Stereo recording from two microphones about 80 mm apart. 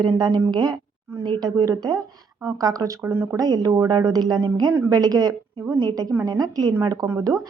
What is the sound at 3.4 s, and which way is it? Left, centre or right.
Speech, right.